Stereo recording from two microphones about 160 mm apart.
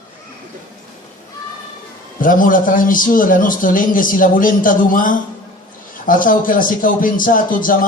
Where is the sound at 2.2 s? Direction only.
60° left (ahead or behind).